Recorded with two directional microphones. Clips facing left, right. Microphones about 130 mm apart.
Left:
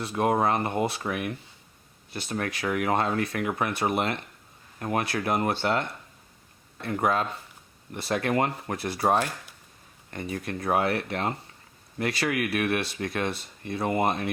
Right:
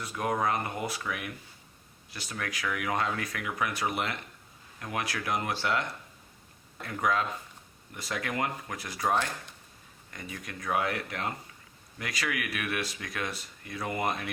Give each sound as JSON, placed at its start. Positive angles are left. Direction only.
{"t": 0.0, "sound": "speech", "side_deg": 30}
{"t": 2.3, "sound": "speech", "side_deg": 30}
{"t": 4.8, "sound": "speech", "side_deg": 45}
{"t": 6.8, "sound": "speech", "side_deg": 30}